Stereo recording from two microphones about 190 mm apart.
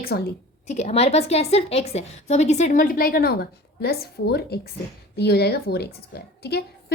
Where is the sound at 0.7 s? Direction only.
35° left (ahead or behind).